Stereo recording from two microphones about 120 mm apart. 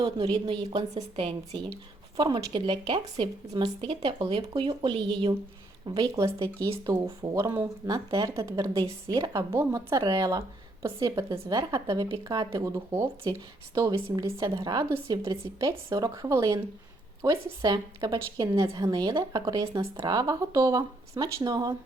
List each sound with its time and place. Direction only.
0.0 s a woman's voice: 45° right (ahead or behind)